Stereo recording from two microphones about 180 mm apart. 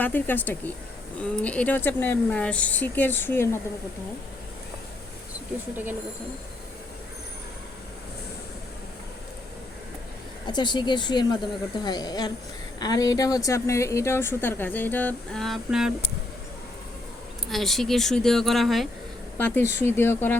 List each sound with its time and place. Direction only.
0.0 s a woman's voice: 10° left (ahead or behind)
5.7 s speech: 10° right (ahead or behind)
10.4 s a woman's voice: 25° left (ahead or behind); by 15.9 s centre (ahead or behind)
17.5 s a woman's voice: centre (ahead or behind)